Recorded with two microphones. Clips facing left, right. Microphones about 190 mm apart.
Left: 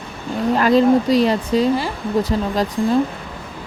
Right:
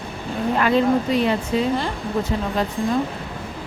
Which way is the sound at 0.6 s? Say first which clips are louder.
Left 4 dB; 35° left (ahead or behind).